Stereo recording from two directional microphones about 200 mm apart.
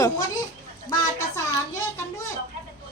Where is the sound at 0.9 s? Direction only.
15° left (ahead or behind).